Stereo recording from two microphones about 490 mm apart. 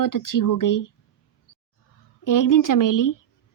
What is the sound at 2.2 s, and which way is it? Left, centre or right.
Speech, left.